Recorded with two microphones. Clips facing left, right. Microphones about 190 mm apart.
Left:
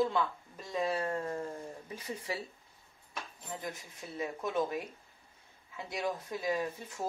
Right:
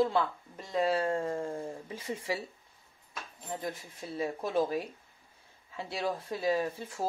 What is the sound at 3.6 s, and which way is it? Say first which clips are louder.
Speech: right 4 dB; 30° right (ahead or behind).